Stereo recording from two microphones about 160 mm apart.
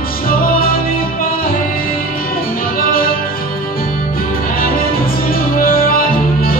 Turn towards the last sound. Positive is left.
turn(degrees=65)  # may be behind; listen again after turning